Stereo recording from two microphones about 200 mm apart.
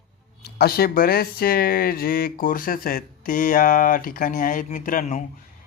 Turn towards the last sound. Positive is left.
turn(degrees=45)  # may be behind; listen again after turning